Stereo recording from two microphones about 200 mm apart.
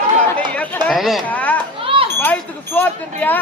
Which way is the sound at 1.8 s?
25° right (ahead or behind).